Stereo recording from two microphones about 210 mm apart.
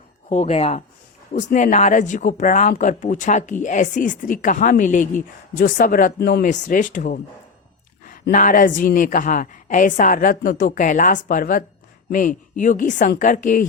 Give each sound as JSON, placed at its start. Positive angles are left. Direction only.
{"t": 0.3, "sound": "speech", "side_deg": 35}